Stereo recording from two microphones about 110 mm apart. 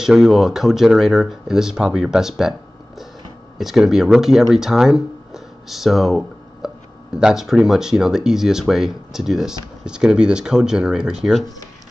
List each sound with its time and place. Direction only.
0.0 s speech: 5° right (ahead or behind)
3.5 s speech: 5° right (ahead or behind)